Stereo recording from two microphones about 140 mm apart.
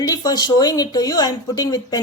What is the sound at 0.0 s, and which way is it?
Speech, 25° left (ahead or behind).